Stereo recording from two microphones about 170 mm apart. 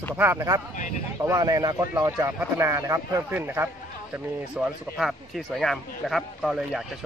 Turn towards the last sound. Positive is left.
turn(degrees=0)  # may be behind; listen again after turning